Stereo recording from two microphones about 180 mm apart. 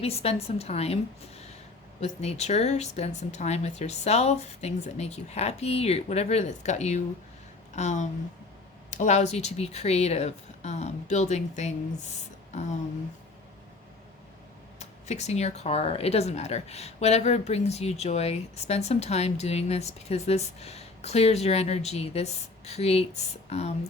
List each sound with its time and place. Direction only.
0.0 s speech: 35° left (ahead or behind)
2.0 s speech: 35° left (ahead or behind)
14.8 s speech: 40° left (ahead or behind)